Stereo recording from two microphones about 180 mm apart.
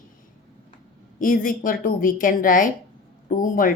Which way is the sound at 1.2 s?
50° left (ahead or behind).